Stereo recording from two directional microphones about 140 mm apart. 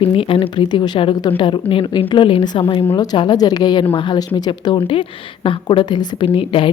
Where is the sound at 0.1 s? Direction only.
40° left (ahead or behind).